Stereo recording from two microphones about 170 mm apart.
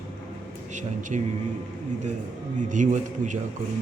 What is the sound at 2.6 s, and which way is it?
Speech, 45° right (ahead or behind).